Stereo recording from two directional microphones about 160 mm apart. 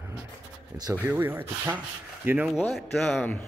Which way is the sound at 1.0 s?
10° right (ahead or behind).